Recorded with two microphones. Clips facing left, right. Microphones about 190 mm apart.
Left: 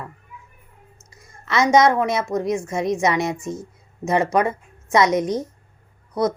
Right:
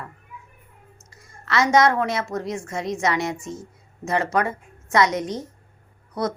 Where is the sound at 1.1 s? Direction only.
20° left (ahead or behind).